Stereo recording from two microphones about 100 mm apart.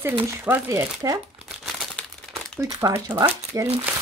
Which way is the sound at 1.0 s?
40° right (ahead or behind).